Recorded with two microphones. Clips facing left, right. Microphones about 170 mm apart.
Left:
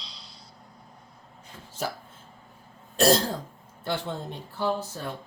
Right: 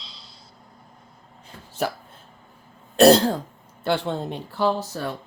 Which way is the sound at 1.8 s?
65° right (ahead or behind).